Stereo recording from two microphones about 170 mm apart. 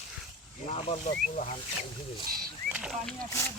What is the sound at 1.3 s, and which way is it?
Speech, 40° left (ahead or behind).